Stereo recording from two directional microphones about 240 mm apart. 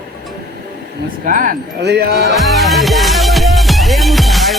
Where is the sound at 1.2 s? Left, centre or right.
Right.